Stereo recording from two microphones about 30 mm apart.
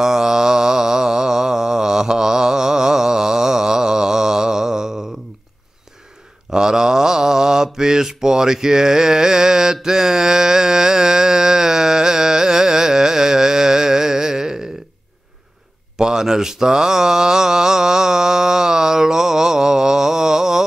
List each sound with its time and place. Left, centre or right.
0.0 s mantra: centre
6.5 s mantra: right
16.0 s mantra: right